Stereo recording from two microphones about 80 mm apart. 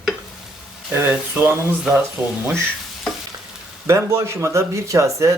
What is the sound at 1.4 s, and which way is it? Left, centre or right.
Speech, right.